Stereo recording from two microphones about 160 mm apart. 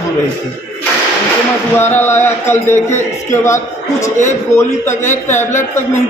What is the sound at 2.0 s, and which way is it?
A man's voice, 15° left (ahead or behind).